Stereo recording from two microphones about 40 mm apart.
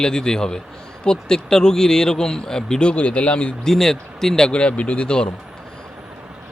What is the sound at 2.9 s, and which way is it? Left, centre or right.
Speech, left.